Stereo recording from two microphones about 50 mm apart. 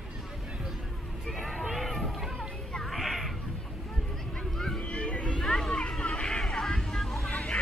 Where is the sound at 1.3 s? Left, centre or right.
Centre.